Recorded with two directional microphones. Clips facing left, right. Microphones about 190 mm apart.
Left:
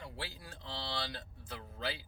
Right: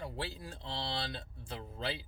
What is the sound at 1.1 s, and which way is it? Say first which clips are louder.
Speech: right 3 dB; 25° right (ahead or behind).